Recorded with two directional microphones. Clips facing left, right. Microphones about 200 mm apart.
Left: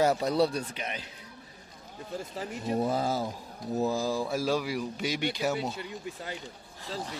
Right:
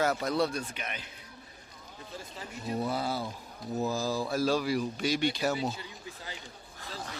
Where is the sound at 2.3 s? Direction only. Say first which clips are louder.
Left 4 dB; 45° left (ahead or behind).